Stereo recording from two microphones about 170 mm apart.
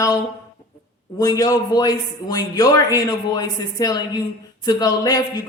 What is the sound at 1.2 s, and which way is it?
A man's voice, 20° left (ahead or behind).